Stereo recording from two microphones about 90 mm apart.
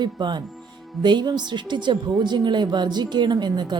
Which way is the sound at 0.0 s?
55° right (ahead or behind).